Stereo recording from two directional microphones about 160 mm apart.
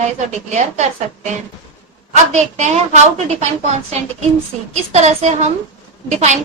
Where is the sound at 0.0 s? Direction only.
45° right (ahead or behind).